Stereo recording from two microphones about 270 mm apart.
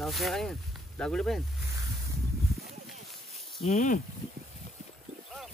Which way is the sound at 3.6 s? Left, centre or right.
Left.